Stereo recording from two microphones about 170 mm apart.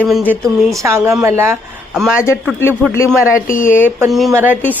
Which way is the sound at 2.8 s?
5° left (ahead or behind).